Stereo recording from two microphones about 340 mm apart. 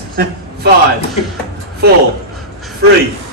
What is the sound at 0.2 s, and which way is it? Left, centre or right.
Speech, right.